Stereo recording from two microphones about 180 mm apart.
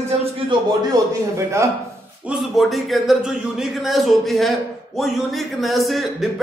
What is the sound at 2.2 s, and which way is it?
Speech, centre (ahead or behind).